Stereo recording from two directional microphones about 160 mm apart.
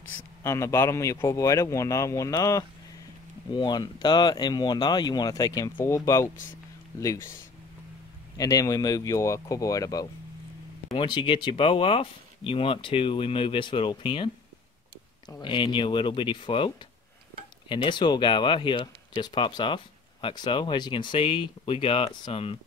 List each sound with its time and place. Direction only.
0.4 s a man's voice: 20° left (ahead or behind)
6.3 s speech: 55° left (ahead or behind)
8.4 s a man's voice: 20° left (ahead or behind)